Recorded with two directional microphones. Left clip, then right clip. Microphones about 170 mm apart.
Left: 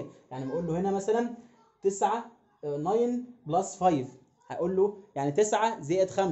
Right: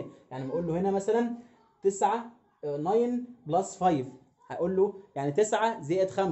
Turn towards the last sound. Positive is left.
turn(degrees=5)  # may be behind; listen again after turning